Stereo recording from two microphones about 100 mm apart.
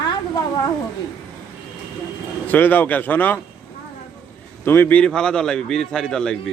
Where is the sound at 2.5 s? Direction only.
20° left (ahead or behind).